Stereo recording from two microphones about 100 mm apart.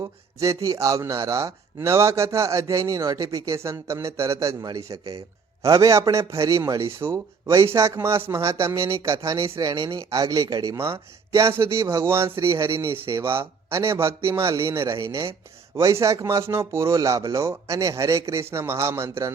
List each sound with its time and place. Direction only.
0.0 s a man's voice: 35° right (ahead or behind)
10.1 s a man's voice: 35° right (ahead or behind)